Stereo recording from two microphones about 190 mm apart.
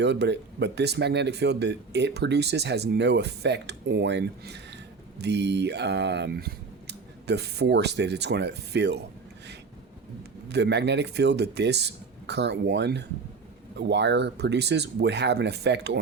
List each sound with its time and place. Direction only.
0.0 s speech: 65° right (ahead or behind)
10.5 s speech: 65° right (ahead or behind)